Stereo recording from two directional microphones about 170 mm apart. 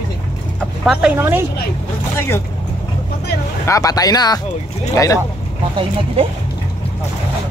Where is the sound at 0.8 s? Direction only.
5° right (ahead or behind).